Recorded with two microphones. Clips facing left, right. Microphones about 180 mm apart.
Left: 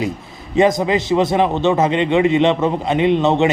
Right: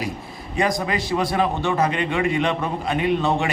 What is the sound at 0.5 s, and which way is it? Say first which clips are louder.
A man's voice: left 8 dB; 25° left (ahead or behind).